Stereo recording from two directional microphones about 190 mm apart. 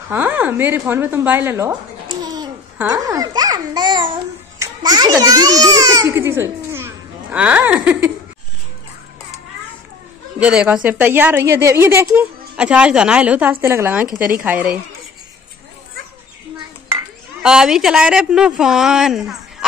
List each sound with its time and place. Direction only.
0.1 s a woman's voice: 10° right (ahead or behind)
2.9 s babbling: 20° right (ahead or behind)
4.6 s a child's voice: 20° right (ahead or behind)
10.4 s a woman's voice: 5° right (ahead or behind)
17.4 s a woman's voice: 5° right (ahead or behind)